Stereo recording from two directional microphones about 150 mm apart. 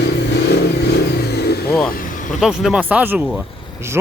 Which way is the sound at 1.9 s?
60° left (ahead or behind).